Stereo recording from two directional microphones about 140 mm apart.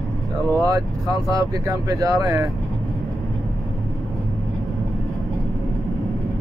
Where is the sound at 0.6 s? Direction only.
25° right (ahead or behind).